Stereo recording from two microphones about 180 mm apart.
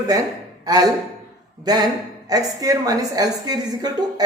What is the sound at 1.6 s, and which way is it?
A woman's voice, 20° right (ahead or behind).